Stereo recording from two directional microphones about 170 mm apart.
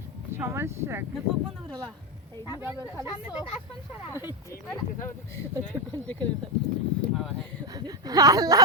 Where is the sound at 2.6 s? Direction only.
10° right (ahead or behind).